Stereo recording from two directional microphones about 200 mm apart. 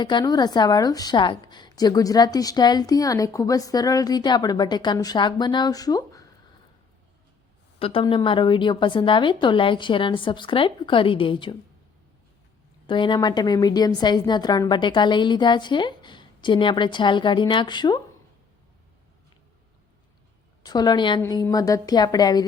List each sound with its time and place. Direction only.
0.0 s a woman's voice: 20° left (ahead or behind)
7.8 s a woman's voice: 30° left (ahead or behind)
12.9 s a woman's voice: 25° left (ahead or behind)
20.7 s a woman's voice: 20° left (ahead or behind)